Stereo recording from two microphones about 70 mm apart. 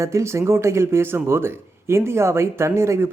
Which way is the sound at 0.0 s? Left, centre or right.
Right.